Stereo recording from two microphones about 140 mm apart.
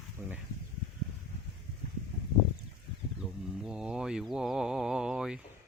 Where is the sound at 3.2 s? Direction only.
5° right (ahead or behind).